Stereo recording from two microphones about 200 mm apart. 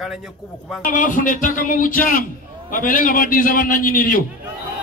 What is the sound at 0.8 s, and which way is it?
Speech, 40° left (ahead or behind).